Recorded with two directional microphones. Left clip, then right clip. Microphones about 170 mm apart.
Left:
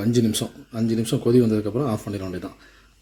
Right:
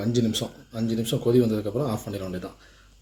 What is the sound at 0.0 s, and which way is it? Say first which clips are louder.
Speech: left 3 dB; 50° left (ahead or behind).